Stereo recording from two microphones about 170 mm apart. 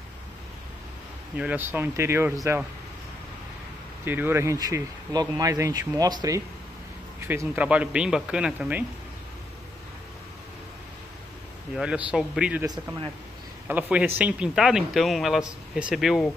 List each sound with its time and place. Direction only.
1.3 s speech: 10° right (ahead or behind)
4.0 s speech: 10° right (ahead or behind)
11.7 s speech: 5° right (ahead or behind)
13.7 s speech: 10° right (ahead or behind)